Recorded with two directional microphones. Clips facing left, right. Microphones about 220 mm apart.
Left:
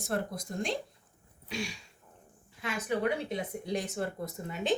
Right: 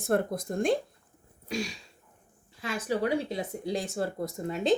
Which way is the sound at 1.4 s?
40° right (ahead or behind).